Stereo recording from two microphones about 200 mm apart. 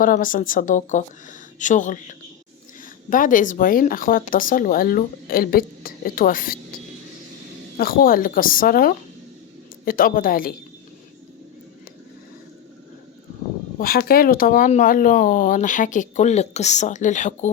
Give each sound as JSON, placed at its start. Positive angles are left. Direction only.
{"t": 0.0, "sound": "speech", "side_deg": 45}
{"t": 7.8, "sound": "speech", "side_deg": 45}
{"t": 13.7, "sound": "speech", "side_deg": 50}